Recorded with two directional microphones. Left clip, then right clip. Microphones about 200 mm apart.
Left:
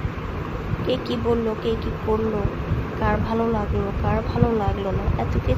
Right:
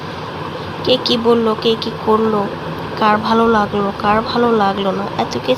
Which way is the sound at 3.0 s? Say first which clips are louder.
Right 10 dB; 10° right (ahead or behind).